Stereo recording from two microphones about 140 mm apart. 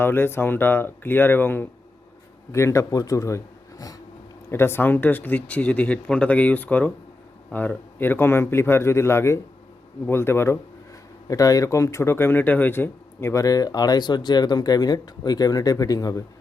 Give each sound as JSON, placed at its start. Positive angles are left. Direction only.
{"t": 0.0, "sound": "a man's voice", "side_deg": 15}